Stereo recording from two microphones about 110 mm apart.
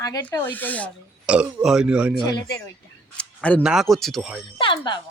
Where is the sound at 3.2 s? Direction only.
10° left (ahead or behind).